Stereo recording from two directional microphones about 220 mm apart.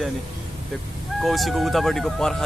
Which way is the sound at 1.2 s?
Centre (ahead or behind).